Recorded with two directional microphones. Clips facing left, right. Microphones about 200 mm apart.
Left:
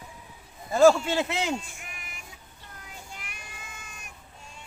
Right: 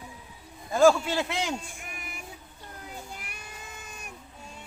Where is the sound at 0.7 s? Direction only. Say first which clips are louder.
Left 2 dB; centre (ahead or behind).